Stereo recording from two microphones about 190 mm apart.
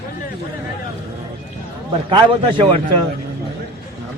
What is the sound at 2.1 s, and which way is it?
Speech, 25° right (ahead or behind).